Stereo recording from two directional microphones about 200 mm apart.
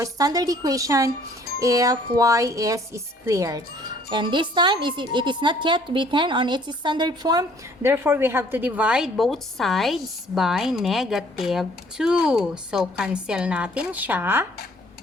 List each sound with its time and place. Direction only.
0.0 s speech: 20° right (ahead or behind)